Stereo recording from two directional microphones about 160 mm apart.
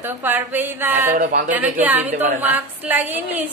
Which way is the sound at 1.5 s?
10° right (ahead or behind).